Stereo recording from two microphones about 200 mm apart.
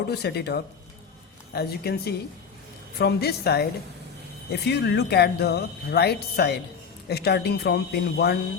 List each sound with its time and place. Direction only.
0.1 s a woman's voice: 55° left (ahead or behind)